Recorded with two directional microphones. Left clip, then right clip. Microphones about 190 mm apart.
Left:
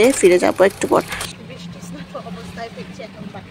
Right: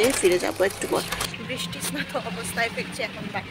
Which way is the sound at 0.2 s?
30° left (ahead or behind).